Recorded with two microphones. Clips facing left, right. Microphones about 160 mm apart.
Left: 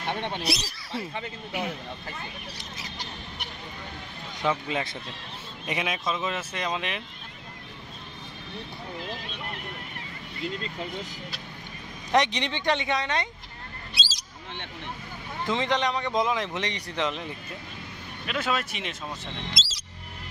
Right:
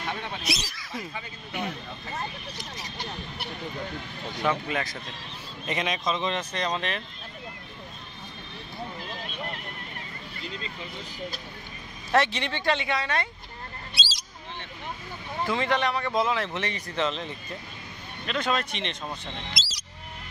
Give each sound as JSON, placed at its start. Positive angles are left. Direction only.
{"t": 0.2, "sound": "speech", "side_deg": 30}
{"t": 1.5, "sound": "speech", "side_deg": 10}
{"t": 4.4, "sound": "speech", "side_deg": 20}
{"t": 5.7, "sound": "speech", "side_deg": 10}
{"t": 12.1, "sound": "speech", "side_deg": 15}
{"t": 15.4, "sound": "speech", "side_deg": 20}
{"t": 19.5, "sound": "speech", "side_deg": 25}